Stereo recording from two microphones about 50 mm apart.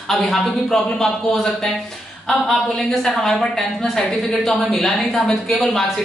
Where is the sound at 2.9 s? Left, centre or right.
Centre.